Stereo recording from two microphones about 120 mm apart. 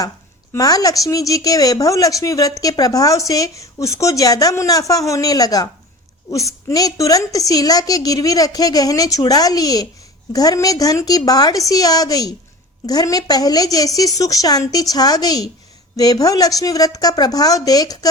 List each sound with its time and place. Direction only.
0.5 s a woman's voice: 30° left (ahead or behind)